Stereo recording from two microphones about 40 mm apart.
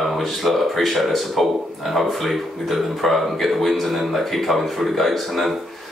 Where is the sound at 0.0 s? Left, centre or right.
Centre.